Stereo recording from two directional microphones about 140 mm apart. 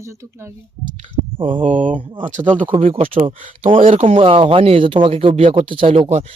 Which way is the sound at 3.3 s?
70° right (ahead or behind).